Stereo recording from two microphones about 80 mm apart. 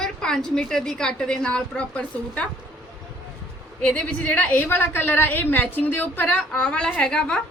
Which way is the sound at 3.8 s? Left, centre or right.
Centre.